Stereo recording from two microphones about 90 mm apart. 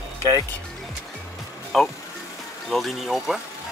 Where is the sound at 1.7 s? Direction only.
5° left (ahead or behind).